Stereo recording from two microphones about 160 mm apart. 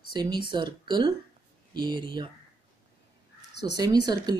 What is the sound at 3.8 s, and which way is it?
Speech, 25° right (ahead or behind).